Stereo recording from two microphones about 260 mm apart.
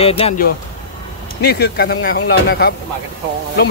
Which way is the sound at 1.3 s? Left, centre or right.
Left.